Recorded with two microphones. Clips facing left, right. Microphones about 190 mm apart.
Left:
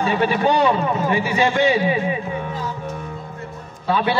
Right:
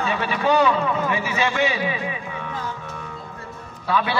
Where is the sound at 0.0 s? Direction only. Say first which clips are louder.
Left 5 dB; 35° left (ahead or behind).